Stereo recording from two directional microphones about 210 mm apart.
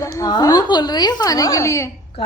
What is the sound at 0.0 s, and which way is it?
A woman's voice, 15° left (ahead or behind).